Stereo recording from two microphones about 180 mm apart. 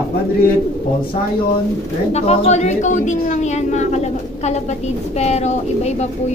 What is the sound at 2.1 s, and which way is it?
A woman's voice, 35° left (ahead or behind).